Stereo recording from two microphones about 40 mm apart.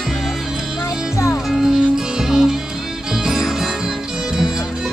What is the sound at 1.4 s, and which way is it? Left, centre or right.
Music, centre.